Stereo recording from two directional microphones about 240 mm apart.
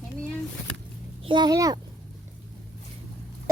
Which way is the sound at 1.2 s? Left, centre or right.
Centre.